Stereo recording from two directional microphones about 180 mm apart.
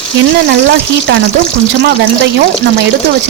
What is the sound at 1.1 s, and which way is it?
Speech, 80° right.